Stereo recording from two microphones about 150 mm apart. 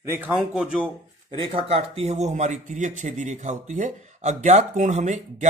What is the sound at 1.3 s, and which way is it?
Speech, 35° right (ahead or behind).